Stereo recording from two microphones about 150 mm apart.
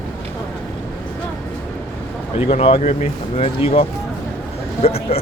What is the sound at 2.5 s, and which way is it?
Speech, 40° left (ahead or behind).